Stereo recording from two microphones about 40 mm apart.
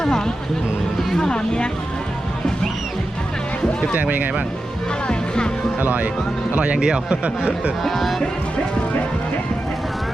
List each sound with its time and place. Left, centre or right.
1.1 s speech: centre
3.9 s speech: right
5.0 s music: left
5.8 s speech: right
6.7 s speech: right
7.9 s speech: centre